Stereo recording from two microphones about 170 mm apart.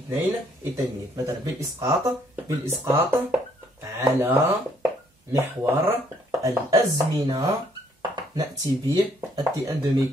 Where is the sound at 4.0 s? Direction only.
15° right (ahead or behind).